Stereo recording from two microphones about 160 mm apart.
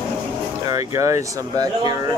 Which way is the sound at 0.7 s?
20° right (ahead or behind).